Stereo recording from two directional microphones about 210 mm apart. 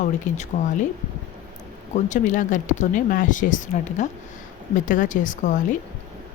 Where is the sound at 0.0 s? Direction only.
35° left (ahead or behind).